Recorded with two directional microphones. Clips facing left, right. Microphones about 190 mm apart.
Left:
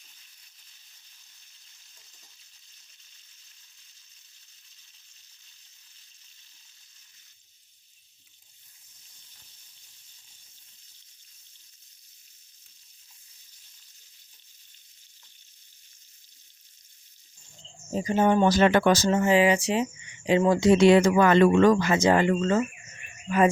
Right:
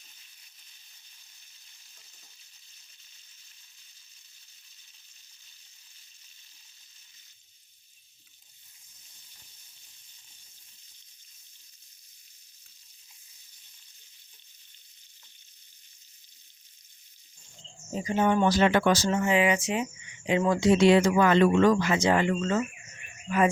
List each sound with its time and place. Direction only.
17.9 s speech: 35° left (ahead or behind)